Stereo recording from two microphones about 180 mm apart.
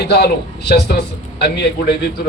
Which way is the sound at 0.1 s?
65° left (ahead or behind).